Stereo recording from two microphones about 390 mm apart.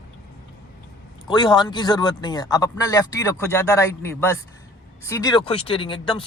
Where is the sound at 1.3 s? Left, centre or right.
Centre.